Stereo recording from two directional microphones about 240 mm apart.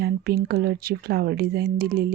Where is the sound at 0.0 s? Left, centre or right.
Right.